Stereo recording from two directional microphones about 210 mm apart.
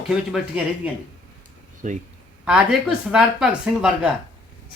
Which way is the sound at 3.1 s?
5° right (ahead or behind).